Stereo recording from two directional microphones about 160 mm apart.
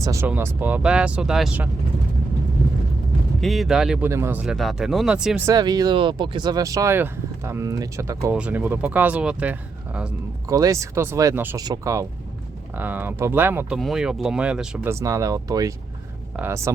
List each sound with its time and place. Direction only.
0.0 s speech: 20° right (ahead or behind)
3.4 s speech: centre (ahead or behind)
5.5 s speech: 25° right (ahead or behind)
8.3 s speech: 10° right (ahead or behind)
10.5 s speech: 20° right (ahead or behind)
13.7 s speech: centre (ahead or behind)
14.8 s speech: 20° right (ahead or behind)